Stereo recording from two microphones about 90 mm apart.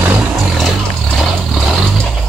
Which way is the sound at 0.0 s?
20° right (ahead or behind).